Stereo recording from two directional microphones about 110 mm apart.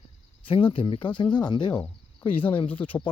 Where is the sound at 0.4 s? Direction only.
55° left (ahead or behind).